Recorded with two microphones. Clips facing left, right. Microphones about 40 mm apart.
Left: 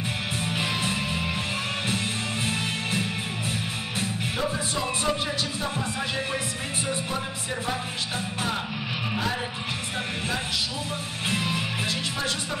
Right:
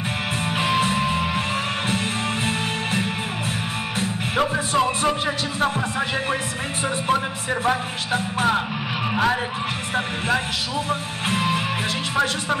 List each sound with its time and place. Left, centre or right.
0.5 s music: right
4.4 s music: right
4.8 s music: right
7.6 s music: right
9.1 s speech: right
9.9 s music: right